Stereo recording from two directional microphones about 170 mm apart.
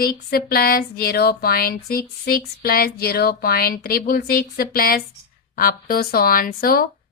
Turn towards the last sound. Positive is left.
turn(degrees=60)  # may be behind; listen again after turning